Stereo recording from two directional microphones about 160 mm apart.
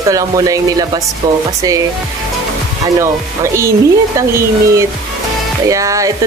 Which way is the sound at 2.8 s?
20° right (ahead or behind).